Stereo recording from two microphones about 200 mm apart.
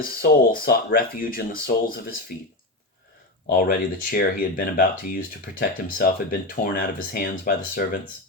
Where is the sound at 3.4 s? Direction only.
45° left (ahead or behind).